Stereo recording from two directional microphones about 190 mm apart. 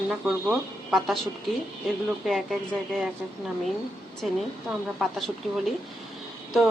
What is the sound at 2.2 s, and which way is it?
A woman's voice, centre (ahead or behind).